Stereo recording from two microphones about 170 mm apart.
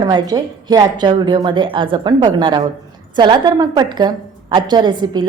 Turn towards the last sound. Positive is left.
turn(degrees=-25)  # may be behind; listen again after turning